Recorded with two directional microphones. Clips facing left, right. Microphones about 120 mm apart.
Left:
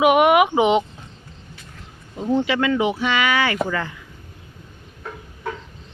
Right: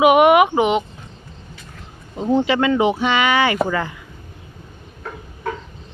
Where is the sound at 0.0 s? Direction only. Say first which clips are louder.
Right 3 dB; centre (ahead or behind).